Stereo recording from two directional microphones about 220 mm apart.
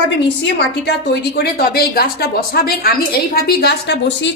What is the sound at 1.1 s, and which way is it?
A woman's voice, 45° left (ahead or behind).